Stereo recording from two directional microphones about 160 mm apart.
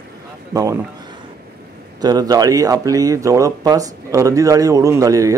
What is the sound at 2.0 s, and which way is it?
Speech, 25° right (ahead or behind).